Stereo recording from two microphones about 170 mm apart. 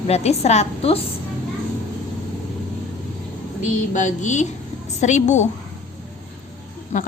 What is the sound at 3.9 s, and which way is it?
Speech, 45° left (ahead or behind).